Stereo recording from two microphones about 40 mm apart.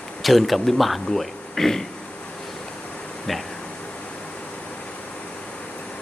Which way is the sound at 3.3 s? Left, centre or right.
Centre.